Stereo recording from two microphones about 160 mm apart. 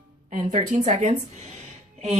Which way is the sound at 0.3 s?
50° right (ahead or behind).